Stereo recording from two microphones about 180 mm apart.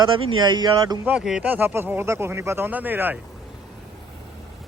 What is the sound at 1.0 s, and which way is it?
Speech, 5° right (ahead or behind).